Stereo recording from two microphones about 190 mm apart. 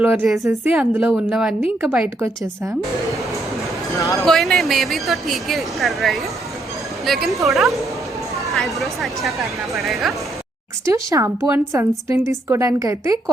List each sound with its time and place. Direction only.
0.0 s a woman's voice: 10° right (ahead or behind)
4.3 s speech: centre (ahead or behind)
10.8 s a woman's voice: 15° right (ahead or behind)